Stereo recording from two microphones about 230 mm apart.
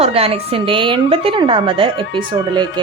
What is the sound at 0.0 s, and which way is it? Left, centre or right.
A woman's voice, right.